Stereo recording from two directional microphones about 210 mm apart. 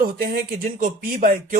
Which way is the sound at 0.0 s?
45° right (ahead or behind).